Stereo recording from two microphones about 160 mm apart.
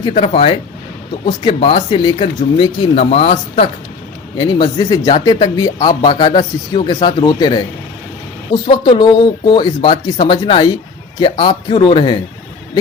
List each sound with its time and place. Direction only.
0.2 s a man's voice: 35° left (ahead or behind)
8.6 s a man's voice: 35° left (ahead or behind)